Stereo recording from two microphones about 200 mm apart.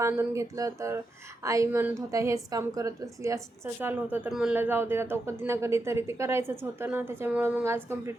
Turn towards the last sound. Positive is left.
turn(degrees=-10)  # may be behind; listen again after turning